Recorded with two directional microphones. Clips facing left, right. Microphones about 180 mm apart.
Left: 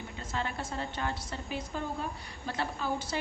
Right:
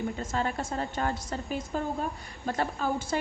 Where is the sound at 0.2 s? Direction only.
45° right (ahead or behind).